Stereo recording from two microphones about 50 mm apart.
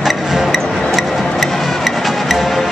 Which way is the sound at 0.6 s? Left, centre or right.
Centre.